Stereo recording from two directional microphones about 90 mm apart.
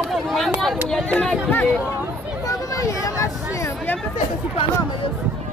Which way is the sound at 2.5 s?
40° left (ahead or behind).